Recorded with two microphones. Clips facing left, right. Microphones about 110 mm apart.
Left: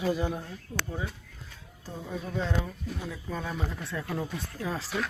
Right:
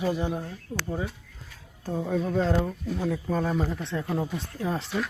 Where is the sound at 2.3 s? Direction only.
45° right (ahead or behind).